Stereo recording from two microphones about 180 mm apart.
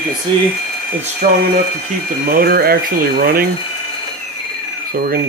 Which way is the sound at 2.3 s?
60° right (ahead or behind).